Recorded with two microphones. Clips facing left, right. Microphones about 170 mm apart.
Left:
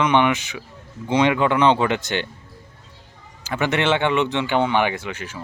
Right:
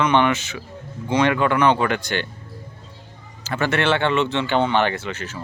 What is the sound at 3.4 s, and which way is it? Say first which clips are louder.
Speech: even; 15° left (ahead or behind).